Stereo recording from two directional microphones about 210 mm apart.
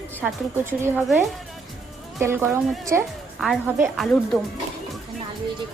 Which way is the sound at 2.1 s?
10° right (ahead or behind).